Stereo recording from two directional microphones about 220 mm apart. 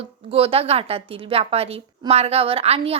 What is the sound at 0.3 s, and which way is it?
Speech, 25° right (ahead or behind).